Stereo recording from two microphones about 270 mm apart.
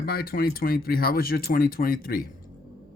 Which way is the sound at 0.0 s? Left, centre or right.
Left.